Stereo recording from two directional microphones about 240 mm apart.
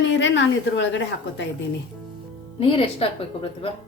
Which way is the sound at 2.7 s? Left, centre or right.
Left.